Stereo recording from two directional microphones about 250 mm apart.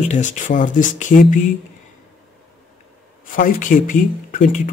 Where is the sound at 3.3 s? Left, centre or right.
Left.